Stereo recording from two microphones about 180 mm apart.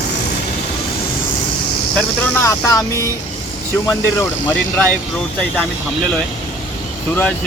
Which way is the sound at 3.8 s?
15° left (ahead or behind).